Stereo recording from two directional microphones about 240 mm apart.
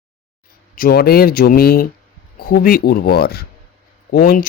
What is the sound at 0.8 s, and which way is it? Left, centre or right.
Speech, left.